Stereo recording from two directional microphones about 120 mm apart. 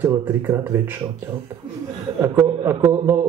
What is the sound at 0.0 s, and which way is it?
Speech, 15° right (ahead or behind).